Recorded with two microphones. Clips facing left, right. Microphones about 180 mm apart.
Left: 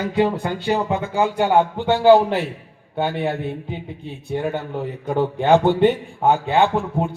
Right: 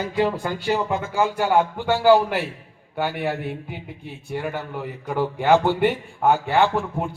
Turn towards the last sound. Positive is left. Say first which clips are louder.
# left 2 dB
turn(degrees=20)  # may be behind; listen again after turning